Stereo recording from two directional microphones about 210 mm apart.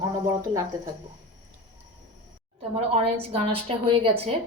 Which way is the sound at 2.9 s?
25° right (ahead or behind).